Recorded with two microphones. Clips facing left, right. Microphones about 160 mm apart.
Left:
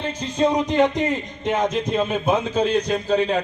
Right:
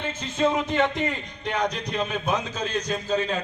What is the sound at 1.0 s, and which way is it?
Speech, 20° left (ahead or behind).